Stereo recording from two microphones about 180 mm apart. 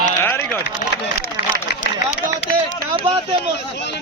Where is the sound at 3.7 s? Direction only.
70° left (ahead or behind).